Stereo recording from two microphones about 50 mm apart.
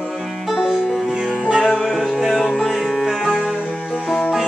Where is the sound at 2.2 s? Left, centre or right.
Centre.